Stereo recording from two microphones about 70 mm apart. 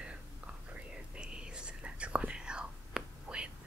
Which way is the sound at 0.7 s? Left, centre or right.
Centre.